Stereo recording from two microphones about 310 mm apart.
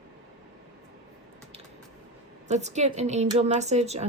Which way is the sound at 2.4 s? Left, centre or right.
Right.